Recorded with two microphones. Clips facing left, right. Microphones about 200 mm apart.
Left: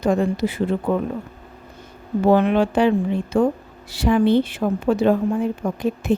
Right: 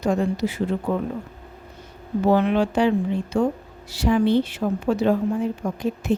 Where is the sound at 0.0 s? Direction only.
55° left (ahead or behind).